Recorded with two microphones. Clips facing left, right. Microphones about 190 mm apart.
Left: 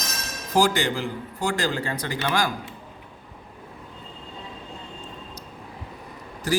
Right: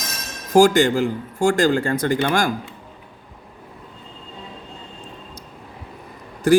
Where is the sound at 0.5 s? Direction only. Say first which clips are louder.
Right 8 dB; 45° right (ahead or behind).